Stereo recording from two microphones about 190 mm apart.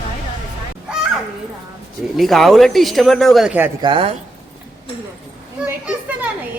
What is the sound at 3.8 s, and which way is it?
Speech, 30° right (ahead or behind).